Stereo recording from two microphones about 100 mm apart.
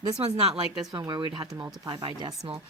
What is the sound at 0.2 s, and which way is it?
Speech, 90° right.